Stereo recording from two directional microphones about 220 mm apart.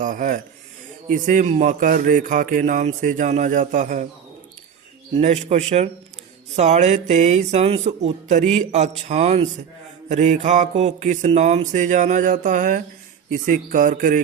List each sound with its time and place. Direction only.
0.0 s a man's voice: 35° right (ahead or behind)
5.1 s a man's voice: 30° right (ahead or behind)